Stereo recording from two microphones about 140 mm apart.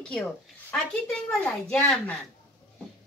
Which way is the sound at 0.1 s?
5° left (ahead or behind).